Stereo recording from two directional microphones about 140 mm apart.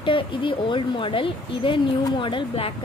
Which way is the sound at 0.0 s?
35° left (ahead or behind).